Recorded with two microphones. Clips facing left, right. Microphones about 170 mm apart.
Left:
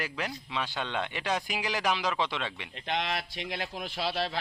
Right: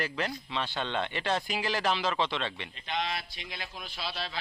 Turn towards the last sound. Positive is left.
turn(degrees=65)  # may be behind; listen again after turning